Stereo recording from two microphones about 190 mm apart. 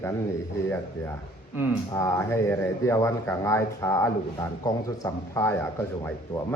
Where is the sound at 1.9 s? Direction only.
15° left (ahead or behind).